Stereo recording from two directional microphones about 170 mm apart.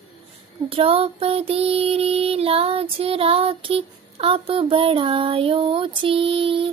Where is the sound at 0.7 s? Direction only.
35° right (ahead or behind).